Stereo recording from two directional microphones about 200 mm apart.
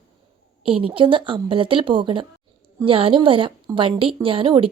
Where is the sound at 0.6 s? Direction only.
25° right (ahead or behind).